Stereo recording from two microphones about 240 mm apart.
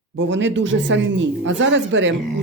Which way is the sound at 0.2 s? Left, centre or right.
Right.